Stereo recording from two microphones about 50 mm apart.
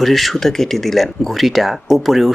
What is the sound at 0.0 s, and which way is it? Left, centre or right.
Speech, centre.